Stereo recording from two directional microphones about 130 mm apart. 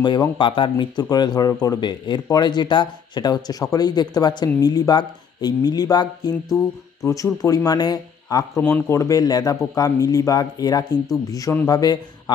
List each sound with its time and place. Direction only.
0.0 s speech: 35° left (ahead or behind)
7.4 s speech: 30° left (ahead or behind)
8.6 s speech: 15° left (ahead or behind)